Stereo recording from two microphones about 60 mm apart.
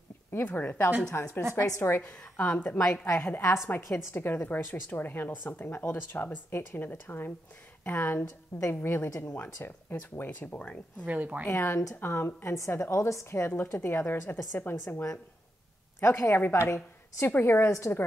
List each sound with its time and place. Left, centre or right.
0.6 s a woman's voice: left
1.1 s a woman's voice: left
3.1 s a woman's voice: left
11.1 s a woman's voice: right
11.5 s a woman's voice: left
12.0 s a woman's voice: left
12.5 s a woman's voice: left
14.5 s a woman's voice: left
16.0 s a woman's voice: left
17.3 s a woman's voice: left
17.6 s a woman's voice: left